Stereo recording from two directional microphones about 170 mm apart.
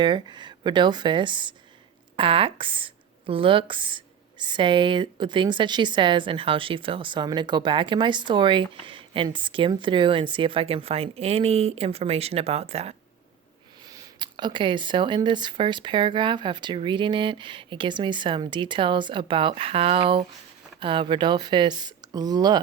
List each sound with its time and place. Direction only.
0.0 s speech: 25° right (ahead or behind)
13.9 s speech: 25° right (ahead or behind)